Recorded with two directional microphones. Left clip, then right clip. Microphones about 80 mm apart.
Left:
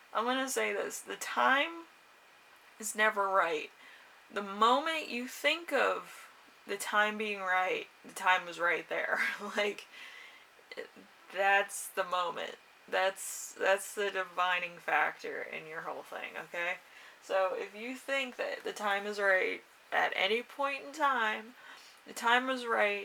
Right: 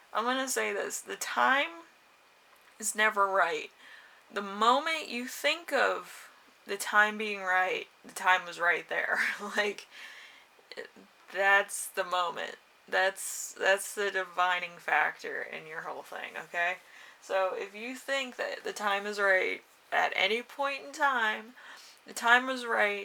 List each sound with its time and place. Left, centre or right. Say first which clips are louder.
0.1 s speech: right 2 dB; right
2.7 s speech: right 3 dB; right
11.3 s speech: right 3 dB; right